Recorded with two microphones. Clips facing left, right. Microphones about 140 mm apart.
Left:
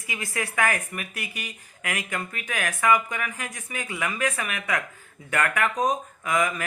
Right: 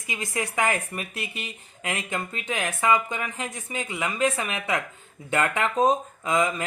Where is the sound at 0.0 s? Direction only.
20° right (ahead or behind).